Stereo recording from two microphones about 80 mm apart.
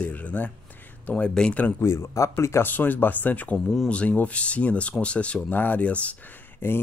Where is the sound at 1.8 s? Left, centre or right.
Left.